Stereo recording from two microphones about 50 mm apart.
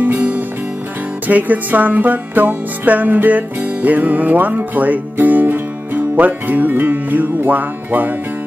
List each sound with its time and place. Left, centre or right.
1.2 s music: right